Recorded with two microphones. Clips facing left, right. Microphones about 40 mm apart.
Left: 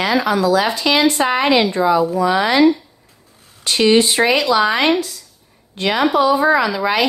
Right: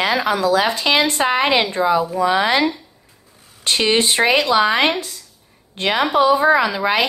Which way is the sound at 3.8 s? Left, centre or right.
Right.